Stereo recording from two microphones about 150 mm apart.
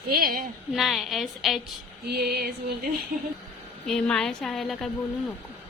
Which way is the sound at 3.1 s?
75° right (ahead or behind).